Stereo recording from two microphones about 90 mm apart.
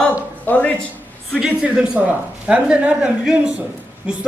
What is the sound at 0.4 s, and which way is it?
Speech, 15° left (ahead or behind).